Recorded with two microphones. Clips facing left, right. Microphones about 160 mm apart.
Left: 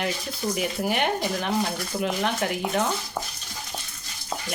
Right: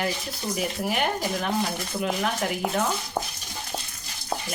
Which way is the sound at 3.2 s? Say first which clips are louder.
Right 3 dB; 35° right (ahead or behind).